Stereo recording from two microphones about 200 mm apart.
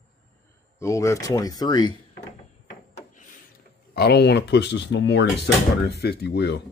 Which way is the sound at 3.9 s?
55° left (ahead or behind).